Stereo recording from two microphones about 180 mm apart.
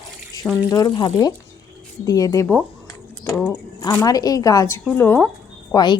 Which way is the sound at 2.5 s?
10° left (ahead or behind).